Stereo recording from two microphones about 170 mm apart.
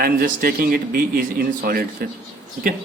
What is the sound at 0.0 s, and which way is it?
A man's voice, 60° right (ahead or behind).